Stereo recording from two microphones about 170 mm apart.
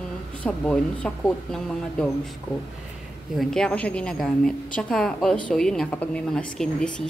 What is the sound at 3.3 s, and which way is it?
A woman's voice, 5° left (ahead or behind).